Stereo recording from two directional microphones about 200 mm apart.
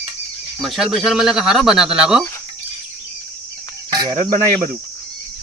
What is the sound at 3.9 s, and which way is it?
Cricket, 20° right (ahead or behind).